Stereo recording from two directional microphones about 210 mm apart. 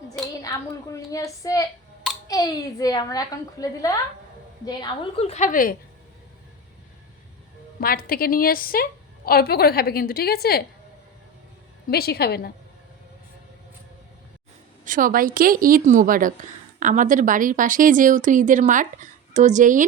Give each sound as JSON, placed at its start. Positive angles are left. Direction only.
{"t": 0.4, "sound": "a woman's voice", "side_deg": 15}
{"t": 7.8, "sound": "a woman's voice", "side_deg": 45}
{"t": 11.9, "sound": "a woman's voice", "side_deg": 50}
{"t": 14.8, "sound": "a woman's voice", "side_deg": -40}